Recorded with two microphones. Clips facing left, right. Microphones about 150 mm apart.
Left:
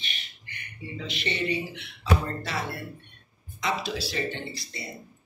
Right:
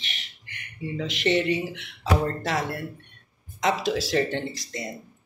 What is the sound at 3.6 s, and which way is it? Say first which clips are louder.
Speech: right 5 dB; 90° right.